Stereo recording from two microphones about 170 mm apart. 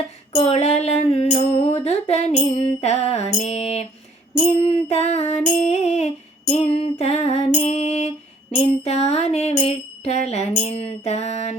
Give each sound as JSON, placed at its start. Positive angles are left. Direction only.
{"t": 0.3, "sound": "music", "side_deg": 40}